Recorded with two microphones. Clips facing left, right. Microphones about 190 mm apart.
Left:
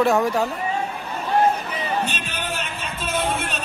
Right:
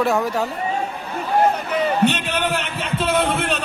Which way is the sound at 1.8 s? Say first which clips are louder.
Right 7 dB; 65° right (ahead or behind).